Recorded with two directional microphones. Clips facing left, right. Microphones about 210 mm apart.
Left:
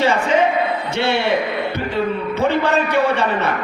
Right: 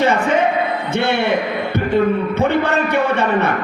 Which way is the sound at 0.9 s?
55° right (ahead or behind).